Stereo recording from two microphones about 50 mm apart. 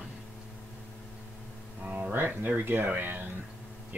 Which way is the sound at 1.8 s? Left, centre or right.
Right.